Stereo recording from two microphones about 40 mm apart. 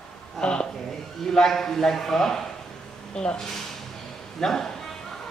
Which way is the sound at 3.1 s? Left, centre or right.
Left.